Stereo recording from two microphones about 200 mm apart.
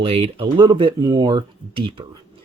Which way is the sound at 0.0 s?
30° right (ahead or behind).